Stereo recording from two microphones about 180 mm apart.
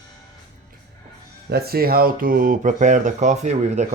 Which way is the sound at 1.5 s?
60° right (ahead or behind).